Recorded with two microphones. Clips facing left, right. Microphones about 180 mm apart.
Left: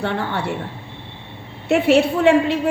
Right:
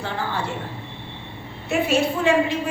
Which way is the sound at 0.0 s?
65° left (ahead or behind).